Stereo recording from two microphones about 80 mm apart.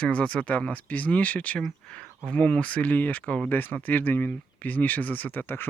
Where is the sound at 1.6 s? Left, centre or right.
Centre.